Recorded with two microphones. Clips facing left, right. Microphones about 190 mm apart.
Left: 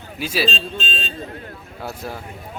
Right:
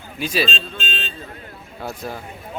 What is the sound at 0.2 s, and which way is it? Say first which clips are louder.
Speech: right 1 dB; 5° left (ahead or behind).